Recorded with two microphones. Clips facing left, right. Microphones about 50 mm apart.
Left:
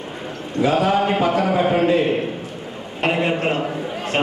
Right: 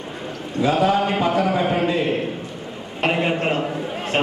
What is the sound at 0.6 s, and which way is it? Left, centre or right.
Speech, left.